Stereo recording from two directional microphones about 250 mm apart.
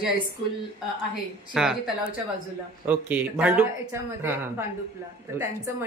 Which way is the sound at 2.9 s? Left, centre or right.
Centre.